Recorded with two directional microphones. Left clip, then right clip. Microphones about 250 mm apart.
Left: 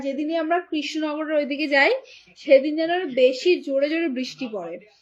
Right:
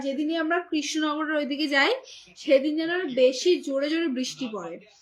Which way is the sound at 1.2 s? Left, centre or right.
Left.